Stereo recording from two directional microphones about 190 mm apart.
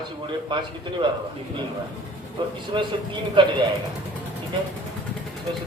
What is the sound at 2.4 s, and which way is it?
A man's voice, 25° right (ahead or behind).